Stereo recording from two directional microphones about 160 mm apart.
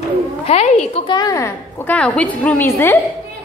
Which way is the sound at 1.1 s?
20° left (ahead or behind).